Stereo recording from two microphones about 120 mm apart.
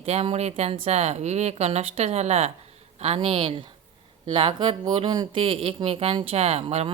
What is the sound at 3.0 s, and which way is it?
Speech, 55° right (ahead or behind).